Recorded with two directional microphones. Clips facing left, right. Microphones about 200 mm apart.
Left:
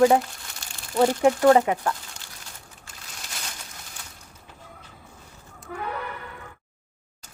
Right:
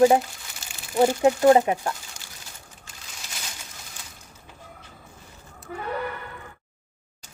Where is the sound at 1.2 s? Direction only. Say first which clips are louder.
Even; 25° right (ahead or behind).